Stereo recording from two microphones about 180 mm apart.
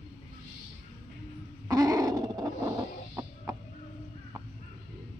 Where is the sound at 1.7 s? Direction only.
20° right (ahead or behind).